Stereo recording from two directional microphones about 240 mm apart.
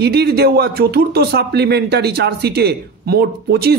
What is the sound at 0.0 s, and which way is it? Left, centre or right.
Speech, right.